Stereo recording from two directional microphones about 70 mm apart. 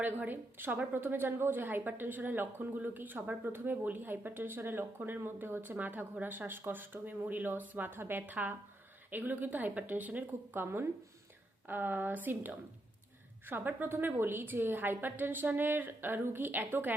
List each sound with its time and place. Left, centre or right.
0.0 s a woman's voice: right